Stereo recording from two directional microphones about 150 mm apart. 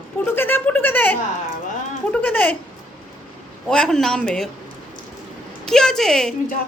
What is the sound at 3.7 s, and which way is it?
Speech, 5° left (ahead or behind).